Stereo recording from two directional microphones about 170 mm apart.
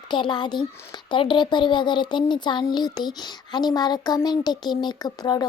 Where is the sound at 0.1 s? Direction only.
25° left (ahead or behind).